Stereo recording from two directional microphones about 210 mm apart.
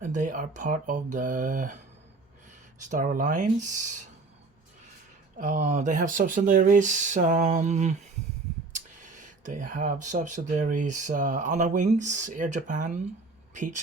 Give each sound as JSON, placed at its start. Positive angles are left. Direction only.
{"t": 0.0, "sound": "speech", "side_deg": -35}
{"t": 2.9, "sound": "speech", "side_deg": -40}
{"t": 5.4, "sound": "speech", "side_deg": -35}